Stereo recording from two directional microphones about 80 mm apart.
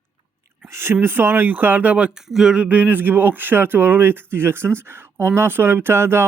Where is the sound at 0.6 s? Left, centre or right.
Right; by 2.6 s centre.